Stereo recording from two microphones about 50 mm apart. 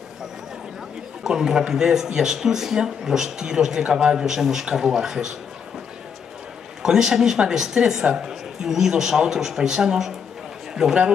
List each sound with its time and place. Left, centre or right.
1.2 s speech: centre
6.8 s a man's voice: centre